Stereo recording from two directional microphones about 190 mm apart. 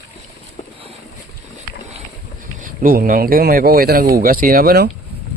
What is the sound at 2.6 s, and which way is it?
Speech, 50° right (ahead or behind).